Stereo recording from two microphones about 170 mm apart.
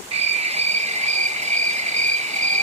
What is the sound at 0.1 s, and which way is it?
Cricket, 40° right (ahead or behind).